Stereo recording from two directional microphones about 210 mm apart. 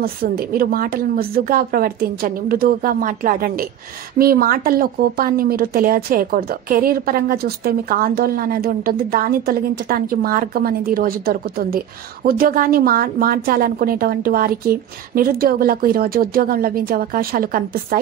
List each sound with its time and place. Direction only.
0.0 s speech: 45° right (ahead or behind)